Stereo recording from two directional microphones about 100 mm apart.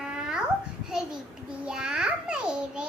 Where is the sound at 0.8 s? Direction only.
5° right (ahead or behind).